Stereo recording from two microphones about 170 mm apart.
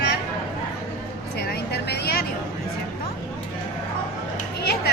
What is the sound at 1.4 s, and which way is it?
Vehicle, 75° left (ahead or behind).